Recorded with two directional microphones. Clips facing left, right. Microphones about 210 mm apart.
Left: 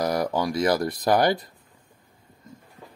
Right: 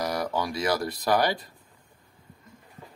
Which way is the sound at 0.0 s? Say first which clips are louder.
Left 4 dB; 45° left (ahead or behind).